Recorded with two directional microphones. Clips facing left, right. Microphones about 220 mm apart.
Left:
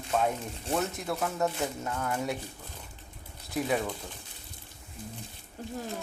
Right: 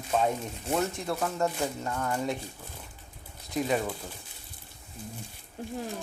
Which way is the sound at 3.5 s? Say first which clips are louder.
Right 1 dB; centre (ahead or behind).